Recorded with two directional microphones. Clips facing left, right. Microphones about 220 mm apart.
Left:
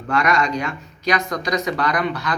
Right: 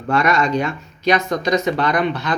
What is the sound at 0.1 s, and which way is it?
Speech, 25° right (ahead or behind).